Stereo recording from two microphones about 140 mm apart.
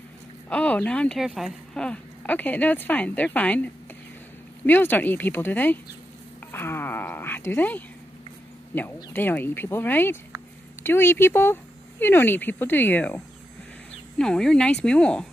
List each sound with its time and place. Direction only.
0.5 s speech: 10° left (ahead or behind)